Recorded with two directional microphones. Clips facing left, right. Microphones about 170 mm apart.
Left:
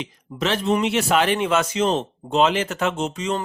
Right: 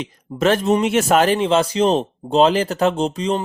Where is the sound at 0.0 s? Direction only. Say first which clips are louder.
Right 7 dB; 45° right (ahead or behind).